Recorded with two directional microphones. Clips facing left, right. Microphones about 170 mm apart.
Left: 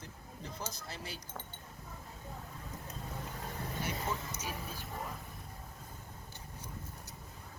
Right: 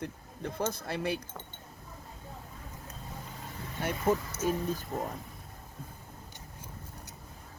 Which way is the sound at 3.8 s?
55° right (ahead or behind).